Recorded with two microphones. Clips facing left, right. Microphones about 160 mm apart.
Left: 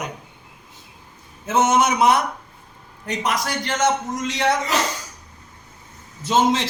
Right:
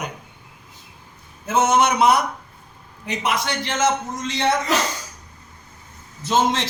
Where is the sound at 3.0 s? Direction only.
5° right (ahead or behind).